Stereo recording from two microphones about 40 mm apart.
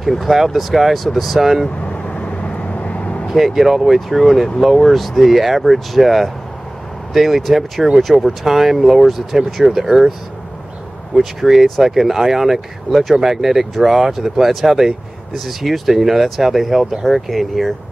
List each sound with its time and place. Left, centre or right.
0.2 s speech: centre
1.9 s vehicle: left
3.3 s speech: centre
11.1 s speech: centre